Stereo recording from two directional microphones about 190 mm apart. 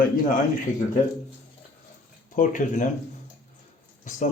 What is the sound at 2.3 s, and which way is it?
Speech, 45° left (ahead or behind).